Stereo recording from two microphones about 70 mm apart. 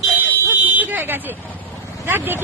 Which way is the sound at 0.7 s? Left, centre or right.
Right.